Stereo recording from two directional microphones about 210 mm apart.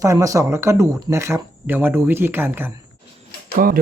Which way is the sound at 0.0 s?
15° right (ahead or behind).